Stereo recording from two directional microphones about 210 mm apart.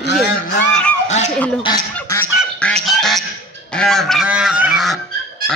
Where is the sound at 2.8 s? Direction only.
Centre (ahead or behind).